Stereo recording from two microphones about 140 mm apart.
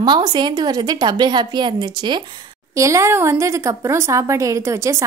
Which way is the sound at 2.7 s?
20° right (ahead or behind).